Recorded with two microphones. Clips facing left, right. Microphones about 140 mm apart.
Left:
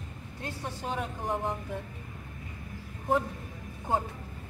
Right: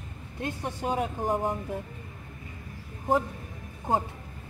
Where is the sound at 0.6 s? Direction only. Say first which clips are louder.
Right 5 dB; 45° right (ahead or behind).